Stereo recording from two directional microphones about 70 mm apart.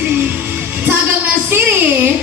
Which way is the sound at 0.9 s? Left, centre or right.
Right.